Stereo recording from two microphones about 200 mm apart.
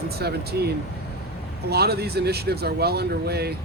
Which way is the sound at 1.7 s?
55° right (ahead or behind).